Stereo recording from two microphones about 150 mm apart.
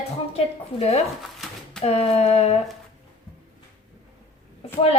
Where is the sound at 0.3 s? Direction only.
45° left (ahead or behind).